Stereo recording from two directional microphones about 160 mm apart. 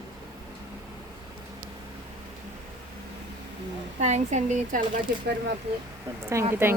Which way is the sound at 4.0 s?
45° right (ahead or behind).